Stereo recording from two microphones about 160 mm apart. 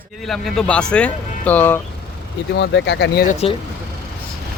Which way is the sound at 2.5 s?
90° left.